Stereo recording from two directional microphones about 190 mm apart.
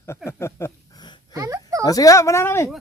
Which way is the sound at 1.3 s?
15° right (ahead or behind).